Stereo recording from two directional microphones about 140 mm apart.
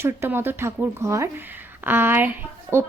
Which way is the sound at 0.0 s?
15° right (ahead or behind).